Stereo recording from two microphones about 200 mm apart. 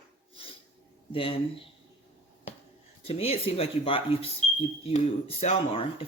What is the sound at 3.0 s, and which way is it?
Speech, 30° left (ahead or behind).